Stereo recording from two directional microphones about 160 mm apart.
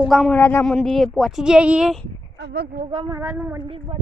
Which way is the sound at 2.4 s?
90° right.